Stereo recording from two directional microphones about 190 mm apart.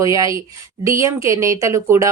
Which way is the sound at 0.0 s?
15° right (ahead or behind).